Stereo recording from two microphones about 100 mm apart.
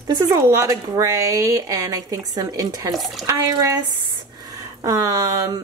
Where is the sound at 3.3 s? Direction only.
35° right (ahead or behind).